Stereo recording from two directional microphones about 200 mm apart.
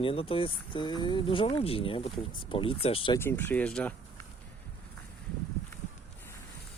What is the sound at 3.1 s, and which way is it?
Speech, 10° left (ahead or behind).